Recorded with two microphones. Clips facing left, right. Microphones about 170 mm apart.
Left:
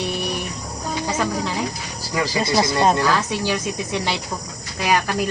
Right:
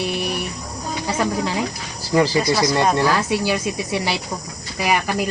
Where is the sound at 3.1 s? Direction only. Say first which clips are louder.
Right 2 dB; 10° right (ahead or behind).